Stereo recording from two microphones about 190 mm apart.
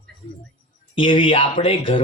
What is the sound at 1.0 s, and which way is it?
A man's voice, 25° left (ahead or behind).